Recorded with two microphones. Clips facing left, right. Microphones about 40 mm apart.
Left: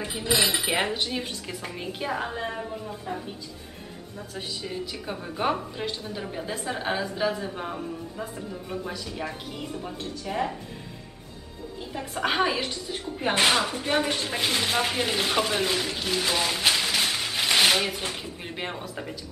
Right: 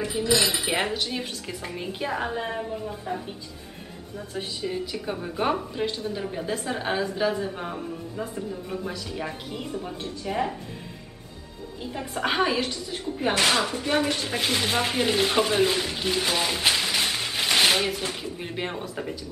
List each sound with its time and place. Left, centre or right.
0.0 s dishes: centre
0.3 s speech: left
0.9 s a woman's voice: centre
4.4 s a woman's voice: centre
11.8 s a woman's voice: centre